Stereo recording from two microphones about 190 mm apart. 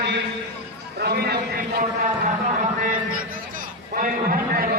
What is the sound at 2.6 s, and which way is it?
A man's voice, 40° right (ahead or behind).